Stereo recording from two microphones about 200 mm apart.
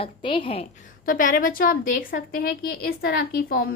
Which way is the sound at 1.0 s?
45° left (ahead or behind).